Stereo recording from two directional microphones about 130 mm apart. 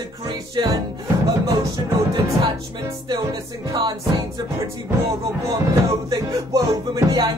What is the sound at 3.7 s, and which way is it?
Music, 35° right (ahead or behind).